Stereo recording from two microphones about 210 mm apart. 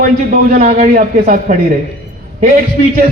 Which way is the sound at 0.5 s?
35° right (ahead or behind).